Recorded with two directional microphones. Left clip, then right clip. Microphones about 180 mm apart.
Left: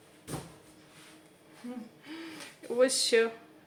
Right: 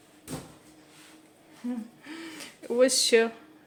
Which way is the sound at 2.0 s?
35° right (ahead or behind).